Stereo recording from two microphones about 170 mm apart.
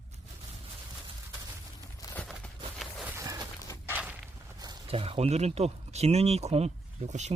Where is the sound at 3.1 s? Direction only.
20° right (ahead or behind).